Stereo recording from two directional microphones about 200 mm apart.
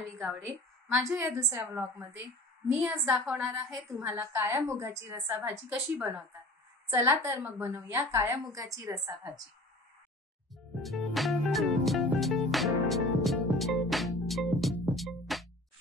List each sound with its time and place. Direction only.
0.9 s a woman's voice: 10° right (ahead or behind)
10.5 s music: centre (ahead or behind)